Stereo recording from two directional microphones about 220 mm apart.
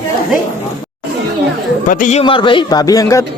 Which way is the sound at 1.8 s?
35° left (ahead or behind).